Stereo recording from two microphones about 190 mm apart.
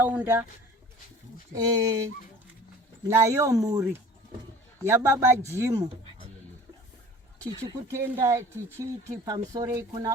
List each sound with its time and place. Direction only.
0.0 s speech: 10° right (ahead or behind)
1.5 s speech: 20° right (ahead or behind)
3.1 s speech: 15° right (ahead or behind)
7.4 s speech: 15° right (ahead or behind)